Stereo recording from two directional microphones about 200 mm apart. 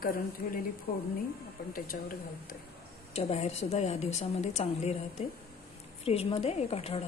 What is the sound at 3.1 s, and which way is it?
A woman's voice, 30° left (ahead or behind).